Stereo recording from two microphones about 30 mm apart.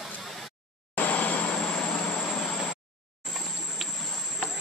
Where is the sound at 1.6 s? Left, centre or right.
Left.